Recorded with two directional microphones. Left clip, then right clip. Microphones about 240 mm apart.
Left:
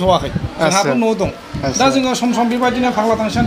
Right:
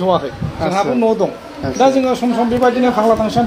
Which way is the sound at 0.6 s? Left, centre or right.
Left.